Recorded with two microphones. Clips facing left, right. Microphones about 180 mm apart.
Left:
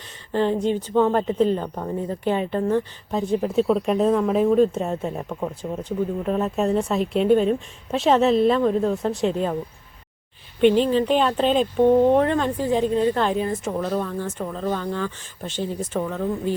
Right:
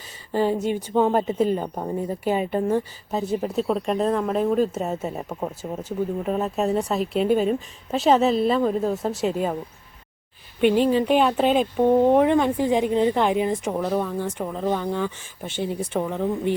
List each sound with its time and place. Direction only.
0.3 s speech: 10° right (ahead or behind)
10.6 s speech: 10° right (ahead or behind)